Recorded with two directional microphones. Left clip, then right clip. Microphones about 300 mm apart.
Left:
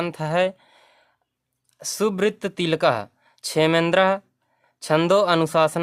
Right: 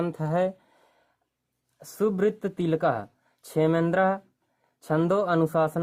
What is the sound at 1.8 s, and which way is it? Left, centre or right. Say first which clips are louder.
Speech: left 3 dB; left.